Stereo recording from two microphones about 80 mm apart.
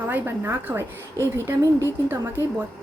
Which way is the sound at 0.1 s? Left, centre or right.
Right.